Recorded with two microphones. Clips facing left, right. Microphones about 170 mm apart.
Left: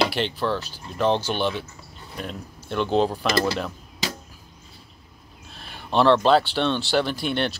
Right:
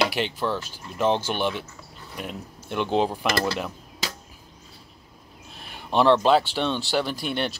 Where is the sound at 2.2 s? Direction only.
15° right (ahead or behind).